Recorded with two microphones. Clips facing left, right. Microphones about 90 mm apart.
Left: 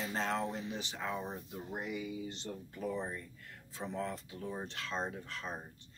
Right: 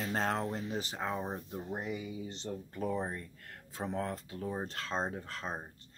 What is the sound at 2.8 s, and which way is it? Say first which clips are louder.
Speech: right 3 dB; 45° right (ahead or behind).